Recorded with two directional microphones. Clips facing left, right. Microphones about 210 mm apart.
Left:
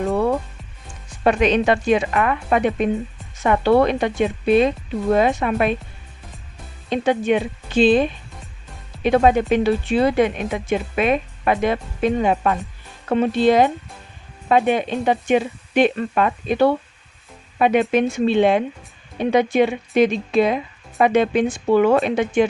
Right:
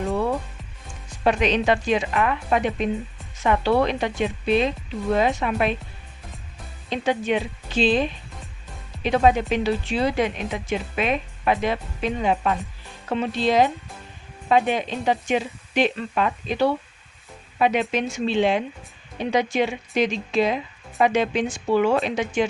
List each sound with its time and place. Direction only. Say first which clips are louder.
1.2 s speech: left 4 dB; 50° left (ahead or behind)
6.9 s speech: left 5 dB; 50° left (ahead or behind)